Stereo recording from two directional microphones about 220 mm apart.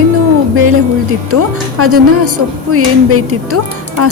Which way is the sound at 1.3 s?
90° right.